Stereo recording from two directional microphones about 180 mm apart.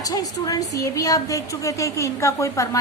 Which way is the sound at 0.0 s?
20° left (ahead or behind).